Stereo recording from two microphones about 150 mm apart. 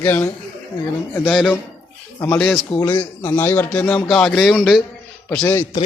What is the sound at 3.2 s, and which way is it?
A man's voice, 15° left (ahead or behind).